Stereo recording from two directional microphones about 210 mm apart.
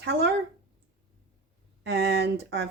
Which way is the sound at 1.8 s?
55° right (ahead or behind).